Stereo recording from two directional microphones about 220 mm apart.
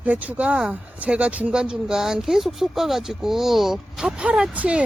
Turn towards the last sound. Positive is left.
turn(degrees=-5)  # may be behind; listen again after turning